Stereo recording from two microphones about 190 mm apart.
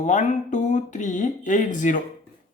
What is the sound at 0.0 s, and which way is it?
Speech, 40° left (ahead or behind).